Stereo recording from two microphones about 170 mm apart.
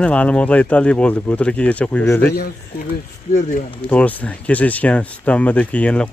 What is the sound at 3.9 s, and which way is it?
Speech, 10° left (ahead or behind).